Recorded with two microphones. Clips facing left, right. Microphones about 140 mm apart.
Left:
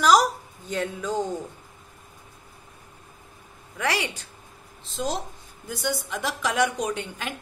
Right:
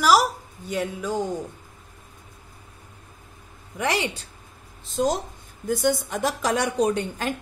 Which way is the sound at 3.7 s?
20° right (ahead or behind).